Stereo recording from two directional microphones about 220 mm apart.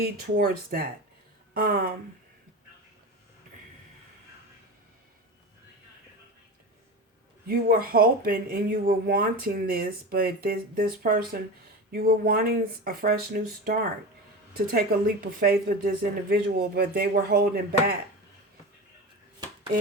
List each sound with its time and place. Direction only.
0.0 s speech: 45° right (ahead or behind)
7.4 s speech: 40° right (ahead or behind)